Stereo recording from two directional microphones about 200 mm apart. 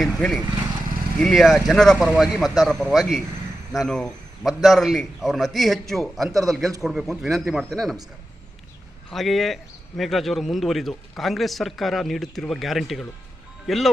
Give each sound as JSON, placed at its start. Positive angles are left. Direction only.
{"t": 0.0, "sound": "a man's voice", "side_deg": 0}
{"t": 9.0, "sound": "a man's voice", "side_deg": 0}